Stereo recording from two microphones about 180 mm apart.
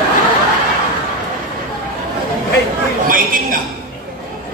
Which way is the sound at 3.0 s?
50° right (ahead or behind).